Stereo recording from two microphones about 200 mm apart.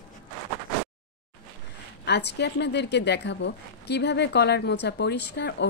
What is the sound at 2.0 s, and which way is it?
Speech, 55° left (ahead or behind).